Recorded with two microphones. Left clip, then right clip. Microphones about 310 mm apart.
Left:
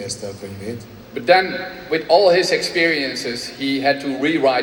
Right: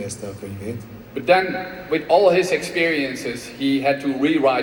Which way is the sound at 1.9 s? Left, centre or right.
Left.